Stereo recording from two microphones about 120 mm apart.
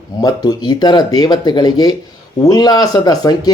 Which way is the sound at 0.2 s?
30° left (ahead or behind).